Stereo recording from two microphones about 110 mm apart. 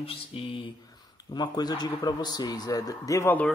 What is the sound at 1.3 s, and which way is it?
A man's voice, 40° left (ahead or behind).